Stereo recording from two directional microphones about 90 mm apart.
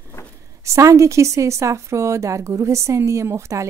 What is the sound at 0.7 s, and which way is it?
A woman's voice, 35° right (ahead or behind).